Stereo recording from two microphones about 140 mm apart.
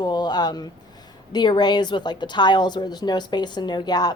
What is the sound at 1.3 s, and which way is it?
A woman's voice, 30° left (ahead or behind).